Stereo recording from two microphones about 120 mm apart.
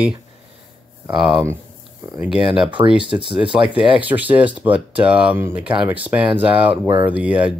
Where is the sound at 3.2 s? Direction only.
45° right (ahead or behind).